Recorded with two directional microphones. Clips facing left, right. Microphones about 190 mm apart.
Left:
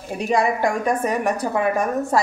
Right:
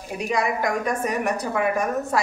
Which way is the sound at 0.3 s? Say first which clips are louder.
Left 4 dB; 30° left (ahead or behind).